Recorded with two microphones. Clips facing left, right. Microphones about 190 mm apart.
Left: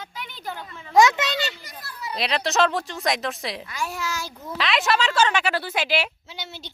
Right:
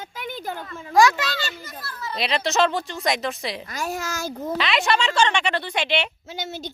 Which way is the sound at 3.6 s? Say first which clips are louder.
Right 1 dB; 40° right (ahead or behind).